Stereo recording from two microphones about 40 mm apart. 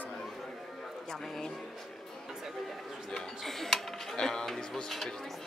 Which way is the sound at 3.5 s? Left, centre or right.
Centre.